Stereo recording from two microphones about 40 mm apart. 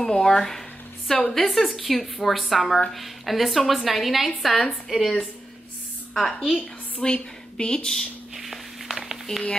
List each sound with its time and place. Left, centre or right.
0.0 s a woman's voice: centre
6.1 s a woman's voice: centre
6.5 s a woman's voice: left
8.4 s a sound: centre